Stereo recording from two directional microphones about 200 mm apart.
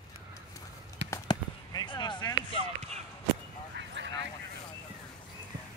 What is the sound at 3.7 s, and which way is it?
Vehicle, 60° right (ahead or behind).